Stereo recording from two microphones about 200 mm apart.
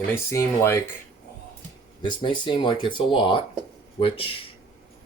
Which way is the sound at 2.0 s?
25° left (ahead or behind).